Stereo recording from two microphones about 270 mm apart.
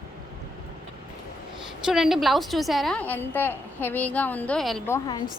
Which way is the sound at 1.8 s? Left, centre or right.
Centre.